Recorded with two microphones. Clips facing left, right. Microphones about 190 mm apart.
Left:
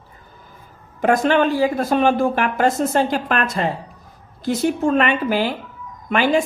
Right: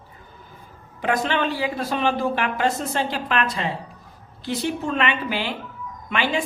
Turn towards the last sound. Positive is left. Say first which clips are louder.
# left 7 dB
turn(degrees=45)  # may be behind; listen again after turning